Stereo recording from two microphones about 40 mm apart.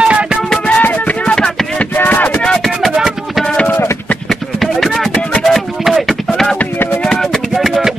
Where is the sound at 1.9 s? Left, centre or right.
Left.